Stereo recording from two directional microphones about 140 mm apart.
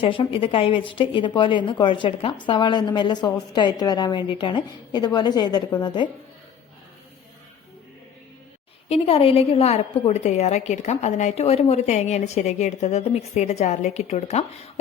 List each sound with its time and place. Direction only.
0.0 s a woman's voice: 40° left (ahead or behind)
8.9 s a woman's voice: 45° left (ahead or behind)